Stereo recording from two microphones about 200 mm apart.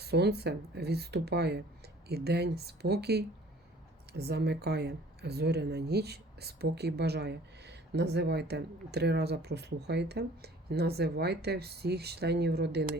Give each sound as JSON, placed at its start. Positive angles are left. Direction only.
{"t": 0.0, "sound": "speech", "side_deg": -55}